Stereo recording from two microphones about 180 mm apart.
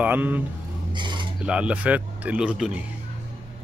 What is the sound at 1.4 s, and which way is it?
Speech, 5° right (ahead or behind).